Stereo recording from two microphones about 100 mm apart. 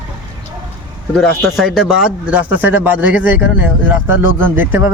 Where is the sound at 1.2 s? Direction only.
Centre (ahead or behind).